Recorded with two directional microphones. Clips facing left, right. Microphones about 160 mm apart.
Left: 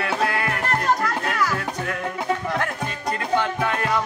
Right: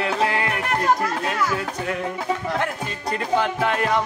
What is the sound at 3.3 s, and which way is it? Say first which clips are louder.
Music: right 2 dB; 25° right (ahead or behind).